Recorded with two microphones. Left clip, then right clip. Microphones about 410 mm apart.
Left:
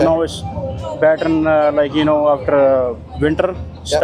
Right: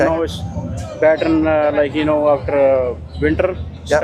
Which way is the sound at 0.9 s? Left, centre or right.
Left.